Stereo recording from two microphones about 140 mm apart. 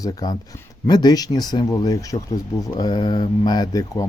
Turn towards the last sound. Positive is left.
turn(degrees=25)  # may be behind; listen again after turning